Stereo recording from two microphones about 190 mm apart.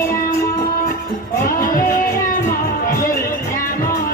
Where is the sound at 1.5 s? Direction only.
45° left (ahead or behind).